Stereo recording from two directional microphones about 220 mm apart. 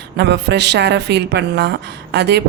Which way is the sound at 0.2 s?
50° right (ahead or behind).